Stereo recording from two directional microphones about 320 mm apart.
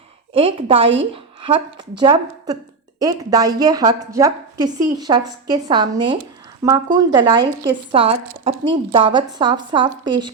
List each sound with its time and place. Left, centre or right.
0.3 s a woman's voice: centre